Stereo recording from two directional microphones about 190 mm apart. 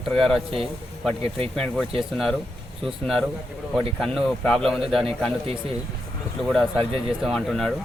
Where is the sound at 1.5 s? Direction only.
Centre (ahead or behind).